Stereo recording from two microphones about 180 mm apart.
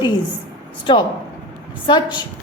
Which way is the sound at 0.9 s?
25° left (ahead or behind).